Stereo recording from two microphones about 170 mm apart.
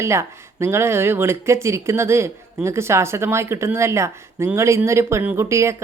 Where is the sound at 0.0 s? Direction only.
15° right (ahead or behind).